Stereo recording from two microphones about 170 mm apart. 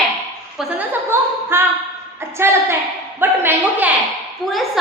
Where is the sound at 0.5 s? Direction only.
10° right (ahead or behind).